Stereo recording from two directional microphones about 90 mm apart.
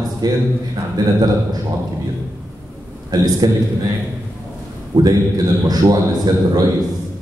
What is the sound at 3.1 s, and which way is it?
Speech, 45° right (ahead or behind).